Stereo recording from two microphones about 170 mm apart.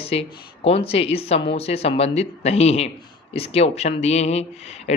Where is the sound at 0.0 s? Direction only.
35° left (ahead or behind).